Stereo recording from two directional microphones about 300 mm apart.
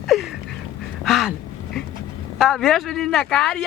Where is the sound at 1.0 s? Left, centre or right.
Centre.